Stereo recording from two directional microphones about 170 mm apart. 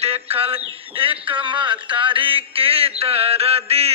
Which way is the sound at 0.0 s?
35° right (ahead or behind).